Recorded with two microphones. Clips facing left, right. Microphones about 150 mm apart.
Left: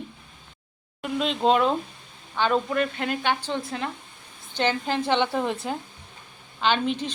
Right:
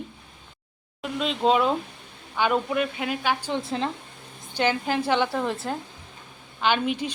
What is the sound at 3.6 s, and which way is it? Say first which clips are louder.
Speech: right 3 dB; 25° right (ahead or behind).